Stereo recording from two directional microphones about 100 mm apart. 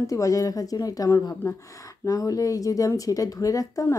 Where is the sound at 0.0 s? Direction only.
30° left (ahead or behind).